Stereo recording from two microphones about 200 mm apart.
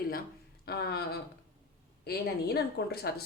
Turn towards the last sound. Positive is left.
turn(degrees=55)  # may be behind; listen again after turning